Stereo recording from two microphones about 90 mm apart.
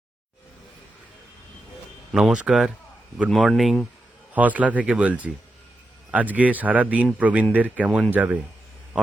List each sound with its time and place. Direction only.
2.1 s a man's voice: 10° right (ahead or behind)
3.2 s speech: 5° left (ahead or behind)
4.4 s a man's voice: 15° right (ahead or behind)